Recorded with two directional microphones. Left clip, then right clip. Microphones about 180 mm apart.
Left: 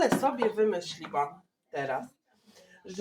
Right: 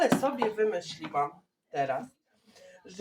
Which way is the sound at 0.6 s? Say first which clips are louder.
Left 1 dB; 20° left (ahead or behind).